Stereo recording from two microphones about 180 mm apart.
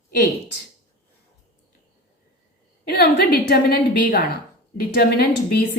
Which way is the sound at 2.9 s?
60° left (ahead or behind).